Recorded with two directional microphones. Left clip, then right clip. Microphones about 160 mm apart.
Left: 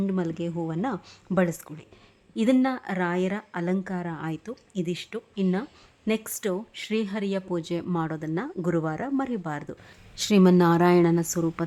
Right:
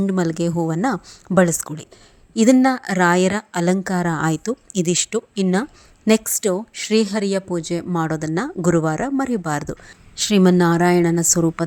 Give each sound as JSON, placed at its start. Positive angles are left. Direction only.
{"t": 0.0, "sound": "a woman's voice", "side_deg": -30}
{"t": 6.3, "sound": "a woman's voice", "side_deg": -30}
{"t": 10.2, "sound": "a woman's voice", "side_deg": -20}